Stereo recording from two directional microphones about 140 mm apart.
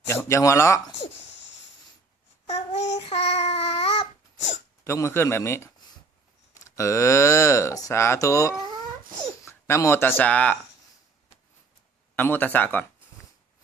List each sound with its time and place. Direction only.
0.1 s speech: 20° left (ahead or behind)
2.5 s child singing: 50° left (ahead or behind)
4.8 s speech: 20° left (ahead or behind)
12.1 s speech: 15° left (ahead or behind)